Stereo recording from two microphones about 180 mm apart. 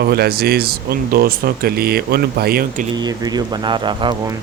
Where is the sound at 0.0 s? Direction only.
60° right (ahead or behind).